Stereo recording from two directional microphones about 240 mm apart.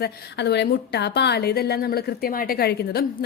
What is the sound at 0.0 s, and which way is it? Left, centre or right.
A woman's voice, left.